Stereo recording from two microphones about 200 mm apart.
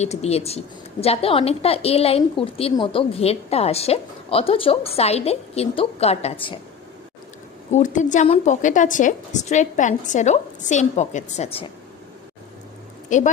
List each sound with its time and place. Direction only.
0.0 s a woman's voice: 35° left (ahead or behind)
7.7 s a woman's voice: 40° left (ahead or behind)
13.1 s speech: 40° left (ahead or behind)